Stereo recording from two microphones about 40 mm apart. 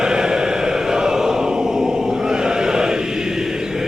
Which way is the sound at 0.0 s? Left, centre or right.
Centre.